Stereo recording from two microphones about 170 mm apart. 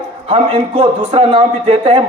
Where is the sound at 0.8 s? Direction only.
35° right (ahead or behind).